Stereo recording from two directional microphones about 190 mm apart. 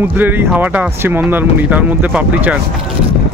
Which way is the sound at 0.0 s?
10° right (ahead or behind).